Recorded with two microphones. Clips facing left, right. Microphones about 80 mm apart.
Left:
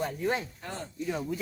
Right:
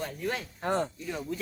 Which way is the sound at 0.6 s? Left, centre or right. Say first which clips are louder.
Right 10 dB; right.